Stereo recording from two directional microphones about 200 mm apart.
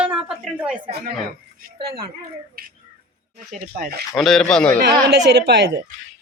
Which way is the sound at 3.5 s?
45° right (ahead or behind).